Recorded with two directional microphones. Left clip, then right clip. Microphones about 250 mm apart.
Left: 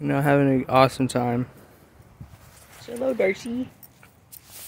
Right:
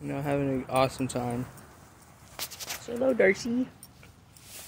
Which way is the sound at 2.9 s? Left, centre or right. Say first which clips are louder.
Left 1 dB; centre.